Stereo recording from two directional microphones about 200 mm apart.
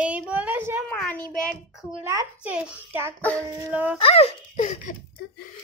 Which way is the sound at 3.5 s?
10° right (ahead or behind).